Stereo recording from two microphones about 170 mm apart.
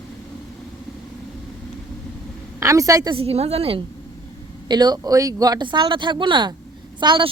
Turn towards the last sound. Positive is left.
turn(degrees=-25)  # may be behind; listen again after turning